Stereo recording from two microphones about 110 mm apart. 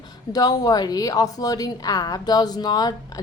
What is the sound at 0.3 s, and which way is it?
A woman's voice, 35° left (ahead or behind).